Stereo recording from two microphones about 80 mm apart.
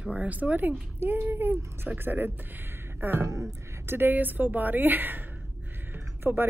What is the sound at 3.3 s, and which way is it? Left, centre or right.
Speech, right.